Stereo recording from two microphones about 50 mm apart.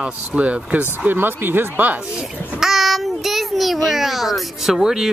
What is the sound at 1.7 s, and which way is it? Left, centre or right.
Speech, right.